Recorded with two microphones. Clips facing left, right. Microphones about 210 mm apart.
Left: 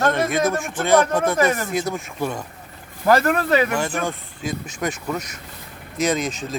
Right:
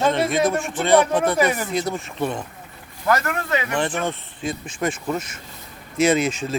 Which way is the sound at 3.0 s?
35° left (ahead or behind).